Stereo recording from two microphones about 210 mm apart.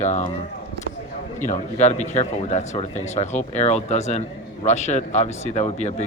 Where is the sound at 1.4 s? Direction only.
35° left (ahead or behind).